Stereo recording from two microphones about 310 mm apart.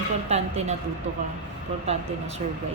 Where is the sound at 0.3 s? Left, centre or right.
Right.